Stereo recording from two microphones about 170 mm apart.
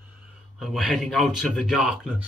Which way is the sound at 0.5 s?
Centre (ahead or behind).